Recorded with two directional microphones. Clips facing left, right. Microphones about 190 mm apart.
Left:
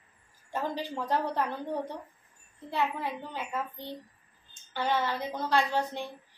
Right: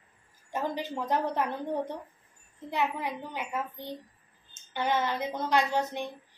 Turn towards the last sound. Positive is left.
turn(degrees=-15)  # may be behind; listen again after turning